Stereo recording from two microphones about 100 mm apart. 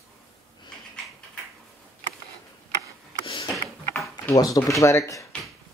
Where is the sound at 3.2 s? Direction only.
50° left (ahead or behind).